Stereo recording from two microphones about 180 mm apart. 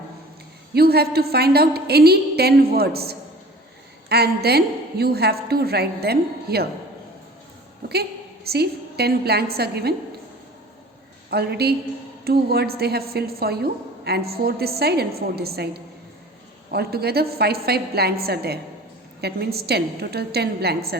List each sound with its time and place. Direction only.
0.7 s a woman's voice: 60° right (ahead or behind)
8.4 s a woman's voice: 60° right (ahead or behind)
11.3 s a woman's voice: 65° right (ahead or behind)